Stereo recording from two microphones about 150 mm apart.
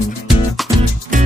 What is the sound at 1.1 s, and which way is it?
Music, 60° right (ahead or behind).